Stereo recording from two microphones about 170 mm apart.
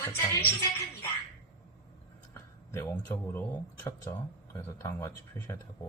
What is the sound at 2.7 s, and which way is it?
Speech, 15° left (ahead or behind).